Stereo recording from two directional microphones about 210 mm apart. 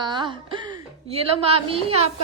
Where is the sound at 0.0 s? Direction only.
20° right (ahead or behind).